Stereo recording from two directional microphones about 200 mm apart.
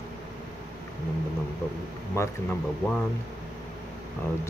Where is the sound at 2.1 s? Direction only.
10° left (ahead or behind).